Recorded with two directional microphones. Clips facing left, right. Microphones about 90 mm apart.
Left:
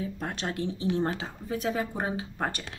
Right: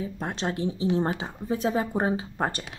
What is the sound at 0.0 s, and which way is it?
Speech, 25° right (ahead or behind).